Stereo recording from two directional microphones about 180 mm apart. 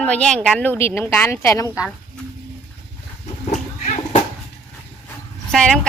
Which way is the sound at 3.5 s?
40° left (ahead or behind).